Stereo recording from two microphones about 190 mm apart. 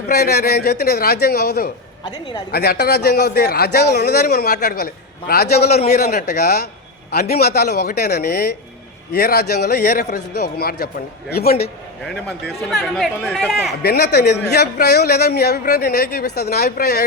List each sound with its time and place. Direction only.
0.1 s speech: 55° left (ahead or behind)
12.5 s speech: centre (ahead or behind)
13.8 s speech: 60° left (ahead or behind)